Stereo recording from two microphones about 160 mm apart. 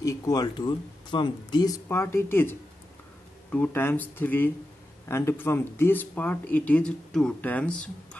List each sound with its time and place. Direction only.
0.0 s speech: 20° left (ahead or behind)
3.5 s speech: 10° left (ahead or behind)